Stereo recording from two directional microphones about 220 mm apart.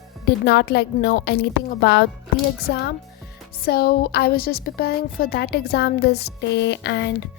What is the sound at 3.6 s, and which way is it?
A woman's voice, 45° left (ahead or behind).